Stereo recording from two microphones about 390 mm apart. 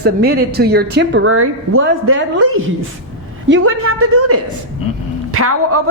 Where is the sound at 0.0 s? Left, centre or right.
Right.